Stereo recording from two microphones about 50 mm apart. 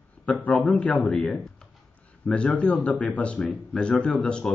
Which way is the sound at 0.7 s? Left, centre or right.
Left.